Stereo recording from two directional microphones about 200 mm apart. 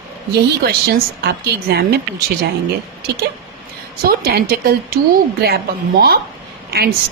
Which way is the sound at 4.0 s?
50° right (ahead or behind).